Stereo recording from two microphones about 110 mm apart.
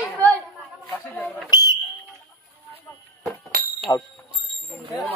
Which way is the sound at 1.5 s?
35° left (ahead or behind).